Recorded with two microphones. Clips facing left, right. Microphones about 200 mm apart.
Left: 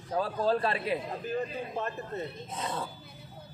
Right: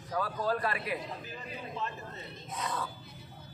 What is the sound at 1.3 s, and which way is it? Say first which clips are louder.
Speech: left 9 dB; 50° left (ahead or behind).